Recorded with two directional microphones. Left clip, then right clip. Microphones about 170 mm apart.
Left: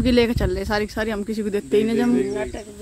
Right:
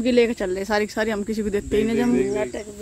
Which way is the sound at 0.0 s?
20° left (ahead or behind).